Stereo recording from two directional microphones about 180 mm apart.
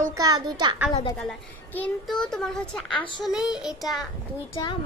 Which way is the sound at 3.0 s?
25° left (ahead or behind).